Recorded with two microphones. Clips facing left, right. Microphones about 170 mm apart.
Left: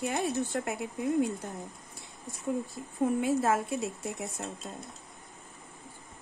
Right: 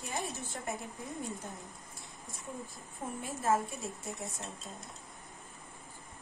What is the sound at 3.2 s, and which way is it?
Speech, 80° left.